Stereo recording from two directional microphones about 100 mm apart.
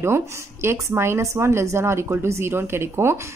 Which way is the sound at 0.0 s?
25° right (ahead or behind).